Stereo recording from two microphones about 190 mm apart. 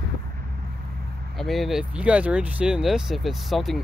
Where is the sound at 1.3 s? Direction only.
Centre (ahead or behind).